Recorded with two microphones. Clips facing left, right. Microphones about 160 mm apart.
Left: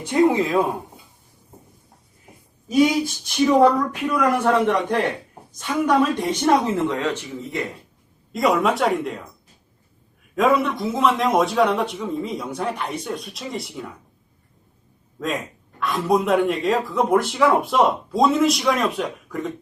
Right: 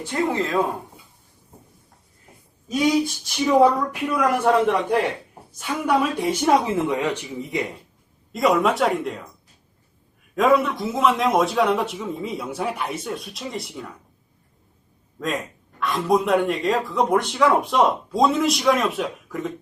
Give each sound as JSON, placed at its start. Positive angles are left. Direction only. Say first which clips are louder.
{"t": 0.0, "sound": "speech", "louder": "left 6 dB", "side_deg": 15}
{"t": 2.6, "sound": "speech", "louder": "left 2 dB", "side_deg": 5}
{"t": 8.3, "sound": "speech", "louder": "even", "side_deg": 0}
{"t": 10.3, "sound": "speech", "louder": "even", "side_deg": 0}
{"t": 15.2, "sound": "speech", "louder": "left 1 dB", "side_deg": 0}